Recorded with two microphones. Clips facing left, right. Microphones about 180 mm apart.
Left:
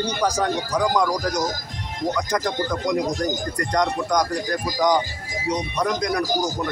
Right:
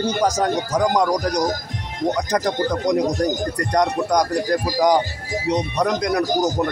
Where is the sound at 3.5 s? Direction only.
35° right (ahead or behind).